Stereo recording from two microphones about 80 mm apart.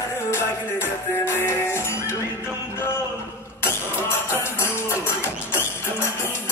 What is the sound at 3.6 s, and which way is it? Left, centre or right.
Vehicle, left.